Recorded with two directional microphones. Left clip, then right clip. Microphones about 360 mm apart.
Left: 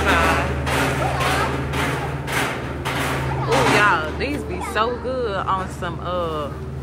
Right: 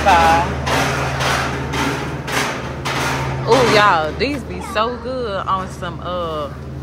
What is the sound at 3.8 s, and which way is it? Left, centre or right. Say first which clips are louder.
Speech: right 4 dB; centre.